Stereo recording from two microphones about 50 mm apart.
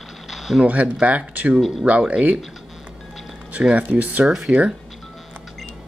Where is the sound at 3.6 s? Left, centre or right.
Right.